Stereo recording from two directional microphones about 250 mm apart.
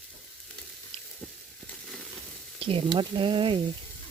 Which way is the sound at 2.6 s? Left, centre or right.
Right.